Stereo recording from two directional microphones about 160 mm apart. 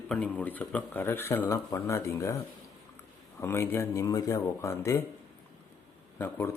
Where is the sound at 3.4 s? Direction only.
15° left (ahead or behind).